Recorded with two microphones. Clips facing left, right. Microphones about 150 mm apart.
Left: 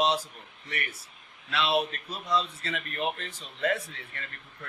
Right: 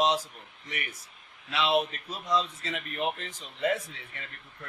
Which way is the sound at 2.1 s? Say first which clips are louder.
Right 1 dB; 10° right (ahead or behind).